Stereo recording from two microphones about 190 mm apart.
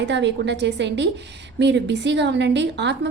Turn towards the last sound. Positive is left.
turn(degrees=-65)  # may be behind; listen again after turning